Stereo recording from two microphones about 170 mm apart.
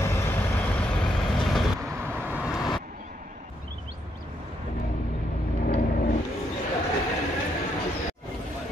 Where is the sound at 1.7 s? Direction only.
15° right (ahead or behind).